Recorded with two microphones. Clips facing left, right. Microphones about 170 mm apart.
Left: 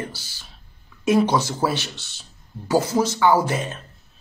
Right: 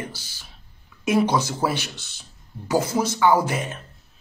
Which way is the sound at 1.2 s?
20° left (ahead or behind).